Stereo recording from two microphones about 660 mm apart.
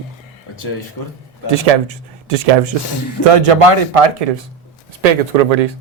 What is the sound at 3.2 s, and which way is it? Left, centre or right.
Speech, right.